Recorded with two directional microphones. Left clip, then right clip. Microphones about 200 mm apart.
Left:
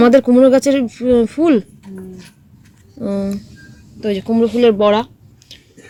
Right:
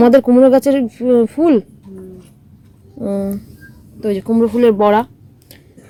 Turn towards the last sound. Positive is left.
turn(degrees=-20)  # may be behind; listen again after turning